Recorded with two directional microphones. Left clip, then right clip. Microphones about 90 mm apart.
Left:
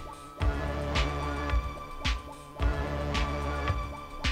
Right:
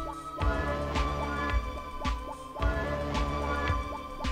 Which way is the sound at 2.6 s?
30° right (ahead or behind).